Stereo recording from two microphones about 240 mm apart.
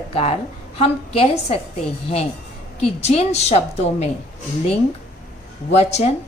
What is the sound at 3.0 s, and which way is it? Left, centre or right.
A woman's voice, left.